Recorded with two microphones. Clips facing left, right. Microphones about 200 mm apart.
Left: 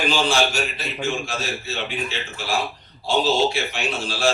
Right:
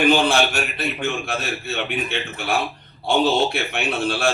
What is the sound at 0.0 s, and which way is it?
A man's voice, 60° right (ahead or behind).